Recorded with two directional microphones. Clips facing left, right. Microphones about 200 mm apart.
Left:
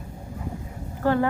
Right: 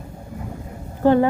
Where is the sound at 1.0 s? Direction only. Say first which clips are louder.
Right 6 dB; 20° right (ahead or behind).